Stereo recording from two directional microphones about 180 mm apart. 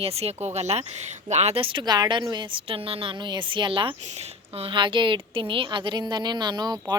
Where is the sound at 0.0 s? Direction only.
35° right (ahead or behind).